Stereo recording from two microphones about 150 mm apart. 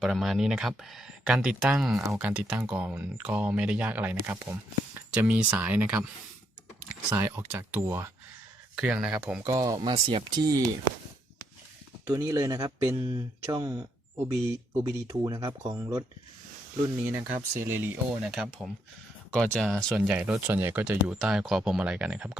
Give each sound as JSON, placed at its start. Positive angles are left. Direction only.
{"t": 0.0, "sound": "speech", "side_deg": 0}
{"t": 7.1, "sound": "speech", "side_deg": -15}
{"t": 8.8, "sound": "speech", "side_deg": -5}
{"t": 9.4, "sound": "speech", "side_deg": -20}
{"t": 12.1, "sound": "speech", "side_deg": -25}
{"t": 17.1, "sound": "speech", "side_deg": -15}
{"t": 18.3, "sound": "speech", "side_deg": 0}
{"t": 19.9, "sound": "speech", "side_deg": -10}